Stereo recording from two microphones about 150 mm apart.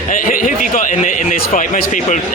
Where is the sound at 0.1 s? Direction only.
65° left (ahead or behind).